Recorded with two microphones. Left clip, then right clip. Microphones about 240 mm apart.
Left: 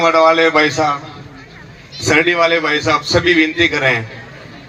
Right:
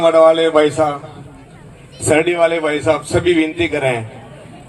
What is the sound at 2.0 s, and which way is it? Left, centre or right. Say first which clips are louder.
A man's voice: left 1 dB; right.